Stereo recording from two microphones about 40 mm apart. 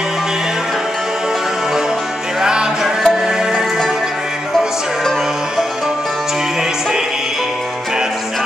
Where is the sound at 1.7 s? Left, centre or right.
Centre.